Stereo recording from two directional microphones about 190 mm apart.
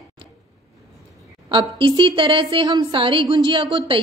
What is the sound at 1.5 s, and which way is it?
A woman's voice, 25° right (ahead or behind).